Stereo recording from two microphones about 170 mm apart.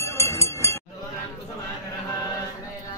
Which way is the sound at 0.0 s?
15° left (ahead or behind).